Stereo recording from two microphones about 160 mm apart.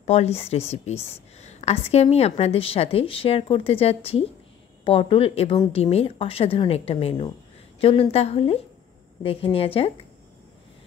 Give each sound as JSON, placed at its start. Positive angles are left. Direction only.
{"t": 0.0, "sound": "a woman's voice", "side_deg": 40}